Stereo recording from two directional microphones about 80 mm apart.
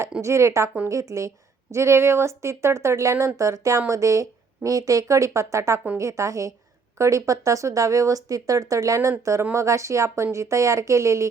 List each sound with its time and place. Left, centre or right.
0.2 s a woman's voice: right